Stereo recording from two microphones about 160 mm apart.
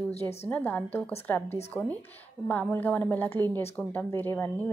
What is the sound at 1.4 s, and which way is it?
Speech, 40° left (ahead or behind).